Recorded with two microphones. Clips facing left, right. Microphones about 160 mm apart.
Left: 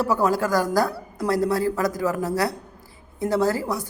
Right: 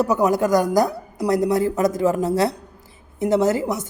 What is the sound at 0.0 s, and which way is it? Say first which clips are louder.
A woman's voice: right 3 dB; 20° right (ahead or behind).